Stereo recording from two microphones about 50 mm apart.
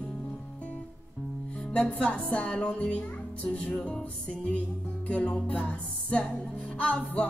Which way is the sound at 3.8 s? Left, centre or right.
Left.